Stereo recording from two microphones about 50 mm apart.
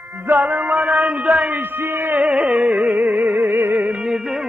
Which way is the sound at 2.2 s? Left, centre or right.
Right.